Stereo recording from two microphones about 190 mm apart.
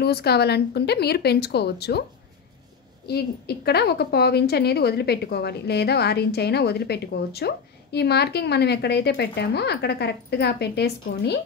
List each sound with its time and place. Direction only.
0.0 s a woman's voice: 55° left (ahead or behind)
3.1 s a woman's voice: 55° left (ahead or behind)